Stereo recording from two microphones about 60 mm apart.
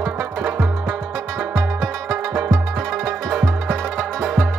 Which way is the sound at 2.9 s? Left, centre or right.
Centre.